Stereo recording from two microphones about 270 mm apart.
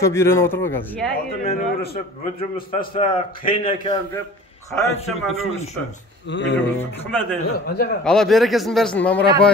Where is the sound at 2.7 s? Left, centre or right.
Centre.